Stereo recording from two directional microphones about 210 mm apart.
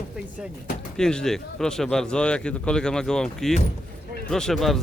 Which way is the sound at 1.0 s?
5° left (ahead or behind).